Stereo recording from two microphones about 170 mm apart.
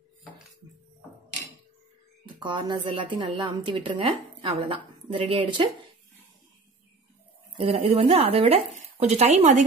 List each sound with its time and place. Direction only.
2.2 s a woman's voice: 25° right (ahead or behind)
7.5 s speech: 35° right (ahead or behind)